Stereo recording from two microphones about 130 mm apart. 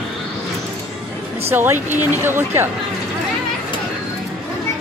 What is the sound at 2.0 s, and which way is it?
Speech, 15° right (ahead or behind).